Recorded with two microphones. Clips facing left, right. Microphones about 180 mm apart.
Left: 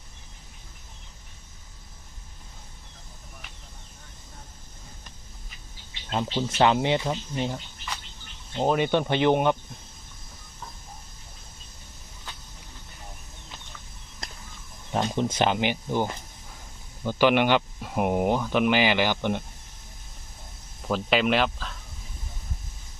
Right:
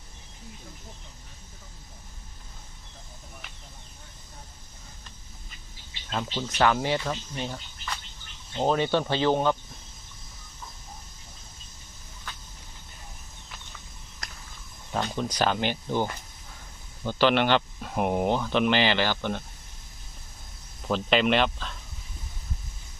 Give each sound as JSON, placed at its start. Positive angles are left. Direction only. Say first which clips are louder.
{"t": 6.3, "sound": "speech", "louder": "left 2 dB", "side_deg": 20}
{"t": 8.6, "sound": "speech", "louder": "left 1 dB", "side_deg": 15}
{"t": 14.2, "sound": "a sound", "louder": "left 2 dB", "side_deg": 25}
{"t": 14.9, "sound": "speech", "louder": "left 3 dB", "side_deg": 20}
{"t": 20.8, "sound": "speech", "louder": "even", "side_deg": 5}